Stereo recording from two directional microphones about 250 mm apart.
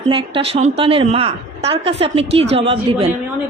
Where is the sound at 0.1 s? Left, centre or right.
Right.